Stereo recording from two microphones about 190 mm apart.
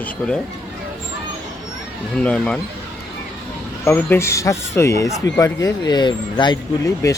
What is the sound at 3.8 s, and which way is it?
Speech, 10° left (ahead or behind).